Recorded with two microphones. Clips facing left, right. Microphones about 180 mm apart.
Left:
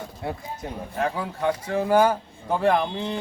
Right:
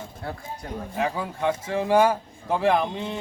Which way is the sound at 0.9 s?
Centre (ahead or behind).